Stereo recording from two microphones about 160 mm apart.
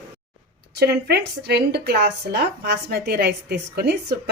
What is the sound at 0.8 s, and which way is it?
A woman's voice, 90° right.